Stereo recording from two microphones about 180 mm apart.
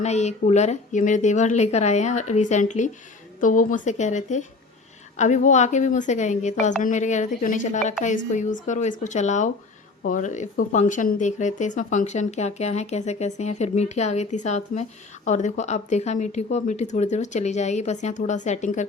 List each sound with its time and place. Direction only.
0.0 s speech: 40° left (ahead or behind)